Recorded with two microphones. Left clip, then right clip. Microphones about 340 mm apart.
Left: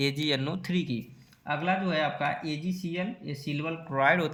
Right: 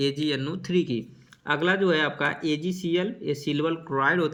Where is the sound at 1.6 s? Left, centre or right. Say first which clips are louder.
Right 5 dB; centre.